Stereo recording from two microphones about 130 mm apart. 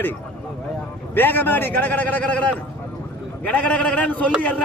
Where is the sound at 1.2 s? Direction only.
15° left (ahead or behind).